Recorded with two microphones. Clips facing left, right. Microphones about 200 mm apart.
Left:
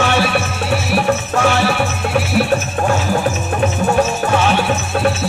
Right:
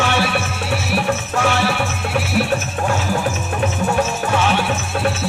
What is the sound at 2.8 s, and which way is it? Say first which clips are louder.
Music: left 3 dB; 50° left (ahead or behind).